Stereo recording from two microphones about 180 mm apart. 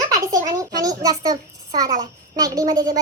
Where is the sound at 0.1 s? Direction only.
20° right (ahead or behind).